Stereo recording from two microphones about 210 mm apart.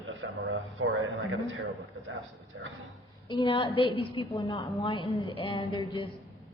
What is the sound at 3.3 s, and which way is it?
A woman's voice, 25° left (ahead or behind).